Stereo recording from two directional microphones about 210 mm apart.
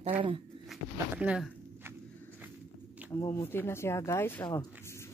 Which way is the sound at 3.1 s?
10° left (ahead or behind).